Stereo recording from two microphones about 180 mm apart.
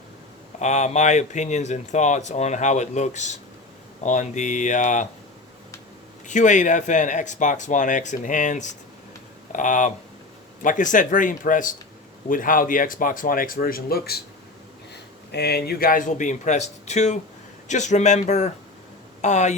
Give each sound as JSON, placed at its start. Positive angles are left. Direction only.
{"t": 0.6, "sound": "speech", "side_deg": 40}
{"t": 6.2, "sound": "speech", "side_deg": 45}
{"t": 15.3, "sound": "speech", "side_deg": 65}